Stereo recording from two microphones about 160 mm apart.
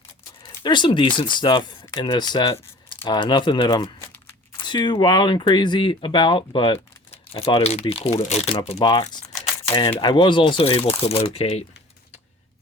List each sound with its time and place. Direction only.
0.4 s speech: 30° left (ahead or behind)
8.8 s speech: 25° left (ahead or behind)